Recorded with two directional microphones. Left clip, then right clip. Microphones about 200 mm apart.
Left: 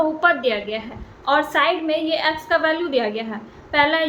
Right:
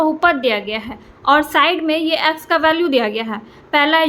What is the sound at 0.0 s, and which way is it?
A woman's voice, 45° right (ahead or behind).